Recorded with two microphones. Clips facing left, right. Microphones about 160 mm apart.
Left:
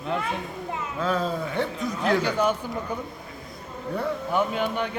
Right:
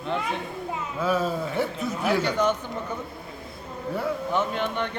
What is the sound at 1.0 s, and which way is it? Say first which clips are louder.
A man's voice: right 1 dB; 5° right (ahead or behind).